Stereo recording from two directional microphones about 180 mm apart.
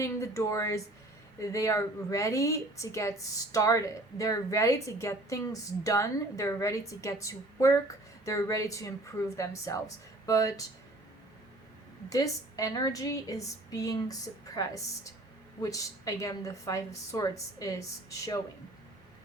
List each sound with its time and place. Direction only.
0.0 s speech: 15° left (ahead or behind)
12.0 s a woman's voice: 20° left (ahead or behind)